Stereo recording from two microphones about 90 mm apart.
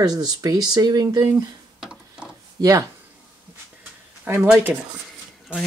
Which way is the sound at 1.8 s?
10° right (ahead or behind).